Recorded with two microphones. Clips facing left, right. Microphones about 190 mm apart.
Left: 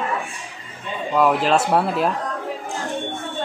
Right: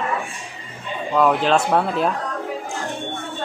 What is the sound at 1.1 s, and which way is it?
Speech, 5° left (ahead or behind).